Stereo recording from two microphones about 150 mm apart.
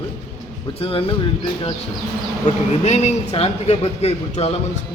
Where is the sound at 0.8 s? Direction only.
40° left (ahead or behind).